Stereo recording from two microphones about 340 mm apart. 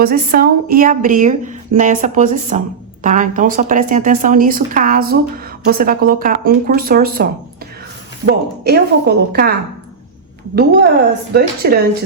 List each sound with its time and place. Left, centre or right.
0.0 s speech: right